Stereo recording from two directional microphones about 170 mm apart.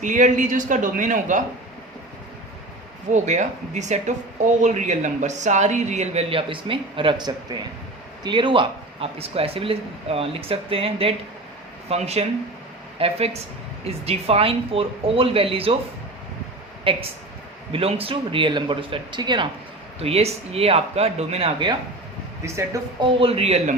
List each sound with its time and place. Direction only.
0.0 s speech: 45° right (ahead or behind)
3.1 s speech: 45° right (ahead or behind)
16.9 s speech: 30° right (ahead or behind)
22.4 s speech: 15° right (ahead or behind)
23.0 s speech: 35° right (ahead or behind)